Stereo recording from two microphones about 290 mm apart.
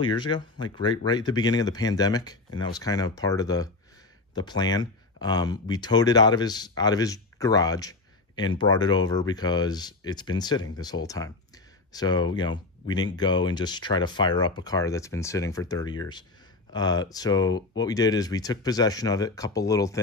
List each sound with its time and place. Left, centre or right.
0.0 s speech: centre